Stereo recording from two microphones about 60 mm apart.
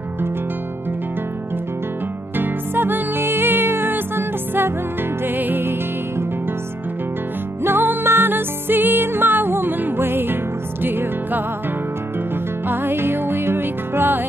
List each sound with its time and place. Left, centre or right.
2.3 s music: right
7.6 s music: right
12.6 s music: right